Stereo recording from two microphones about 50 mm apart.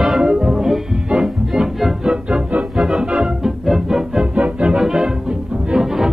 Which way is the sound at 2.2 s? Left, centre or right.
Centre.